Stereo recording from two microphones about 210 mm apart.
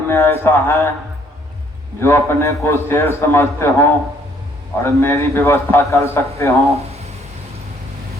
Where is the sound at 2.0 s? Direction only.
10° left (ahead or behind).